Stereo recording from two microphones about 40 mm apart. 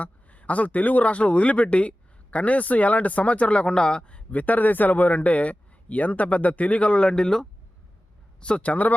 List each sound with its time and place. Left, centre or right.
0.0 s speech: left
4.0 s speech: left
7.1 s speech: centre
8.4 s speech: left